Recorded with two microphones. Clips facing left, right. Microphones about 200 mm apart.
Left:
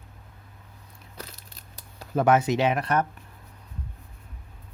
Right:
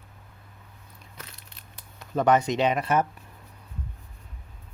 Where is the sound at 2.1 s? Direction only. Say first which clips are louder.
Left 1 dB; 5° left (ahead or behind).